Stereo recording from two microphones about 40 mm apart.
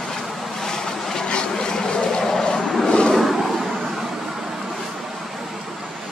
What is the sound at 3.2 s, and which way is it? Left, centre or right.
Vehicle, centre.